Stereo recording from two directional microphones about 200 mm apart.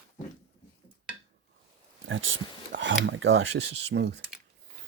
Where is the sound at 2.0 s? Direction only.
75° right (ahead or behind); by 4.1 s 60° right (ahead or behind).